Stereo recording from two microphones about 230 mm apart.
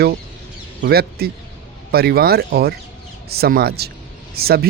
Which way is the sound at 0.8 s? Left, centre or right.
Right.